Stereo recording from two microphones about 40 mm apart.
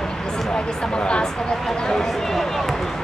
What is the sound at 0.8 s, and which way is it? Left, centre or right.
Speech, left.